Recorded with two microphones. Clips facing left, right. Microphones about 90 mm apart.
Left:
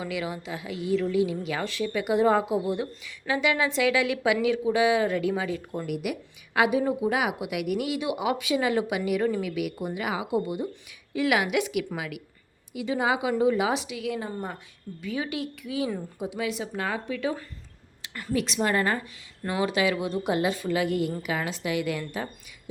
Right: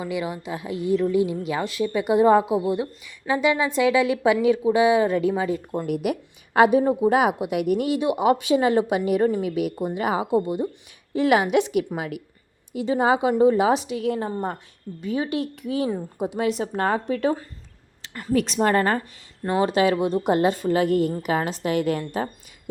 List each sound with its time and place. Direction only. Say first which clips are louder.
0.0 s a woman's voice: right 4 dB; 25° right (ahead or behind)
5.7 s a woman's voice: right 6 dB; 40° right (ahead or behind)